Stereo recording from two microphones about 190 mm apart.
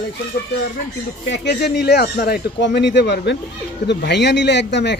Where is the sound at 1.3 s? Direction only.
65° left (ahead or behind).